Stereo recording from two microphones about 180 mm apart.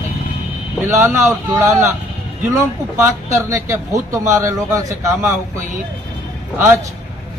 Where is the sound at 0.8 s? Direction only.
15° right (ahead or behind).